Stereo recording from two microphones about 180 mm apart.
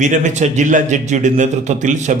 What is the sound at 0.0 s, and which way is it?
Speech, 40° right (ahead or behind).